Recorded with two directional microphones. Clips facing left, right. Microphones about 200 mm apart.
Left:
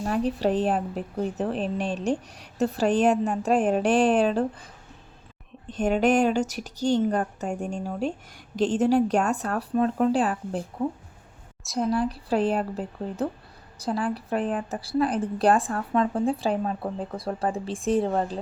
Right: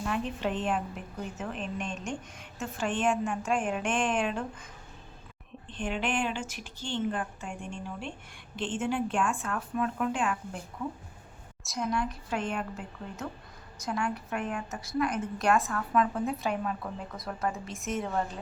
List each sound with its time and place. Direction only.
0.0 s speech: 40° left (ahead or behind)